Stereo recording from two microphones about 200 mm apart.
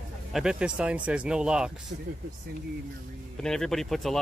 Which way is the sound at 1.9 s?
55° right (ahead or behind).